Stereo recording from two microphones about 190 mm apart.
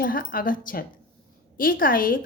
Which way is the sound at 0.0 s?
50° left (ahead or behind).